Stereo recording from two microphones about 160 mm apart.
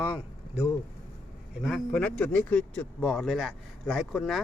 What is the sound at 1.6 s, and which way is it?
Speech, 5° left (ahead or behind).